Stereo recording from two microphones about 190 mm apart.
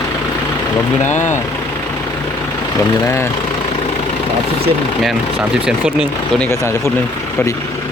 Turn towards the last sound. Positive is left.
turn(degrees=15)  # may be behind; listen again after turning